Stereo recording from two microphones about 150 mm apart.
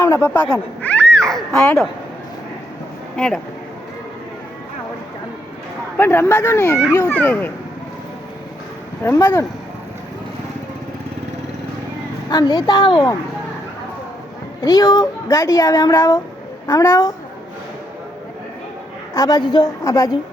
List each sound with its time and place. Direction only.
0.0 s a woman's voice: 20° left (ahead or behind)
0.8 s a sound: 10° left (ahead or behind)
3.2 s speech: 5° left (ahead or behind)
6.0 s speech: 15° left (ahead or behind)
9.0 s a woman's voice: 20° left (ahead or behind)
12.3 s a woman's voice: 25° left (ahead or behind)
14.6 s a woman's voice: 25° left (ahead or behind)
19.1 s a woman's voice: 25° left (ahead or behind)